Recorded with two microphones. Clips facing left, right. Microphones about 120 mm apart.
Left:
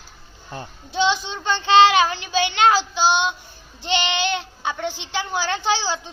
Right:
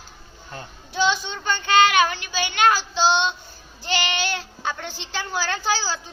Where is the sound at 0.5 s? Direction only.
25° left (ahead or behind).